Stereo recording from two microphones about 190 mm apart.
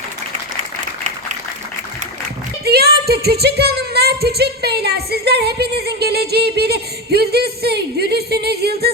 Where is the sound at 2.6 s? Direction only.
55° right (ahead or behind).